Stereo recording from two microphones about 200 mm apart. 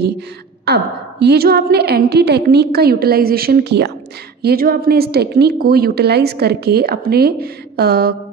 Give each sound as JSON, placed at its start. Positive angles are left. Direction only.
{"t": 0.7, "sound": "a woman's voice", "side_deg": -55}